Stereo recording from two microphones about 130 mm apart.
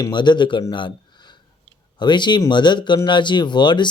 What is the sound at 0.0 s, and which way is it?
Mantra, 35° left (ahead or behind).